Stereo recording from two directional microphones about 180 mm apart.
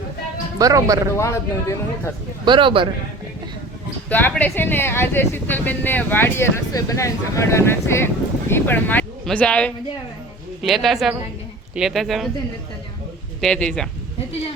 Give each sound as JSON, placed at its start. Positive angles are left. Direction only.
{"t": 0.6, "sound": "a man's voice", "side_deg": -20}
{"t": 1.1, "sound": "speech", "side_deg": 15}
{"t": 2.4, "sound": "a man's voice", "side_deg": -25}
{"t": 4.1, "sound": "speech", "side_deg": 10}
{"t": 13.4, "sound": "speech", "side_deg": 5}